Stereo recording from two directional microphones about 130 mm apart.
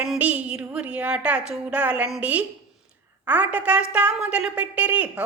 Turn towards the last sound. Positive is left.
turn(degrees=-10)  # may be behind; listen again after turning